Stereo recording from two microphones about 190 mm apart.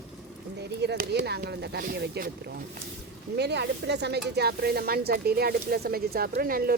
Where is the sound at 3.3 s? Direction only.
60° right (ahead or behind).